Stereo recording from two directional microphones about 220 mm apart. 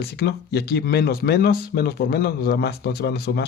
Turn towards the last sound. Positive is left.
turn(degrees=45)  # may be behind; listen again after turning